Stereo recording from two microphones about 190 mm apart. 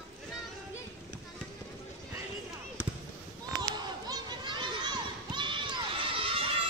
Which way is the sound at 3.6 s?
20° right (ahead or behind).